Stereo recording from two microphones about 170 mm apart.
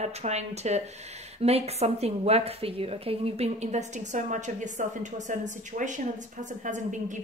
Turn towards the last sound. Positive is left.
turn(degrees=-45)  # may be behind; listen again after turning